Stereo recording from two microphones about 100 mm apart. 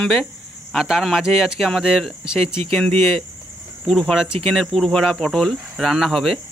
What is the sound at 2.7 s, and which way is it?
Speech, 10° left (ahead or behind).